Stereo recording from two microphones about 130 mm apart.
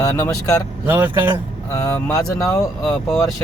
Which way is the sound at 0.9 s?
15° right (ahead or behind).